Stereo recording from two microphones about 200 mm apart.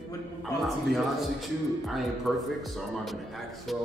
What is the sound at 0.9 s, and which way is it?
A man's voice, centre (ahead or behind).